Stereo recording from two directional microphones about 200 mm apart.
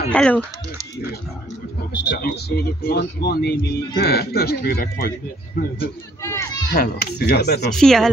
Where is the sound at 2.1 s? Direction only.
50° left (ahead or behind).